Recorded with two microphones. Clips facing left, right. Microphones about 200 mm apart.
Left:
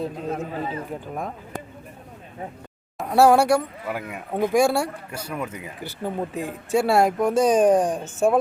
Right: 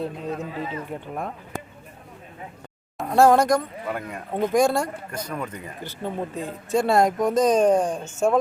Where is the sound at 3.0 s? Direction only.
5° left (ahead or behind).